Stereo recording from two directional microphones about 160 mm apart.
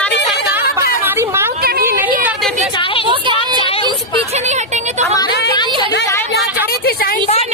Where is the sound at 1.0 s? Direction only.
15° right (ahead or behind).